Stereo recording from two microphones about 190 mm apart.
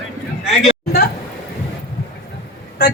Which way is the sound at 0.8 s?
55° left (ahead or behind).